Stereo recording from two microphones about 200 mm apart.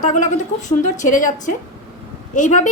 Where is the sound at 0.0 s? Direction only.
40° left (ahead or behind).